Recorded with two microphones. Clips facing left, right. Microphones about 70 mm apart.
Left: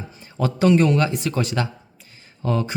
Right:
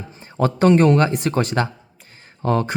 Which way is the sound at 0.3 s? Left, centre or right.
Right.